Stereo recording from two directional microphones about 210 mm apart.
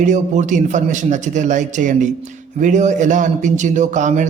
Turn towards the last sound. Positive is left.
turn(degrees=-35)  # may be behind; listen again after turning